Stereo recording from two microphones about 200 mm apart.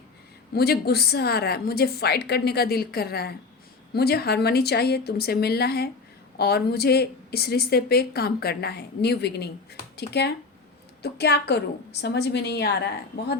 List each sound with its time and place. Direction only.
0.5 s a woman's voice: 50° left (ahead or behind)